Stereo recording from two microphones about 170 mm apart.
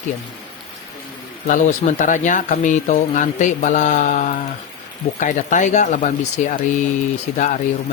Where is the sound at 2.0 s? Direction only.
45° left (ahead or behind).